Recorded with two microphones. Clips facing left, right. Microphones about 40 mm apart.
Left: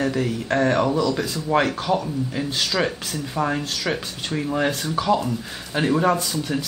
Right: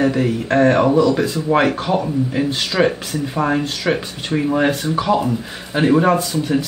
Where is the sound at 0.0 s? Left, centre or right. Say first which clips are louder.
Right 6 dB; centre.